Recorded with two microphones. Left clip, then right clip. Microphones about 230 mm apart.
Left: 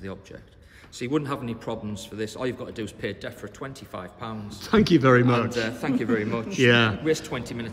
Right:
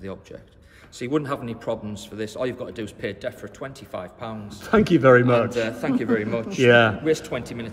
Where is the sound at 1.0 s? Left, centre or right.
Centre.